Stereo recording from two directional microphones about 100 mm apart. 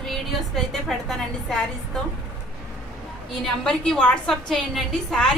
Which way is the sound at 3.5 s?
5° left (ahead or behind).